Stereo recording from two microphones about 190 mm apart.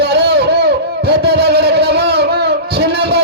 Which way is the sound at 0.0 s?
60° right (ahead or behind).